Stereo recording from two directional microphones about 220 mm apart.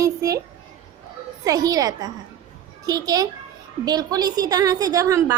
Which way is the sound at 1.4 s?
15° right (ahead or behind).